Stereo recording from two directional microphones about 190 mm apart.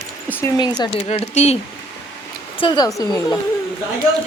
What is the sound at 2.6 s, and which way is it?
Speech, 25° left (ahead or behind).